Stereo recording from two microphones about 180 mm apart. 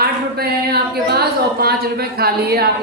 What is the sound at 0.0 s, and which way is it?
A woman's voice, 60° right (ahead or behind).